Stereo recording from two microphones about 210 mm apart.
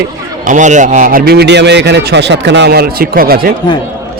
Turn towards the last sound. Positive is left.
turn(degrees=-45)  # may be behind; listen again after turning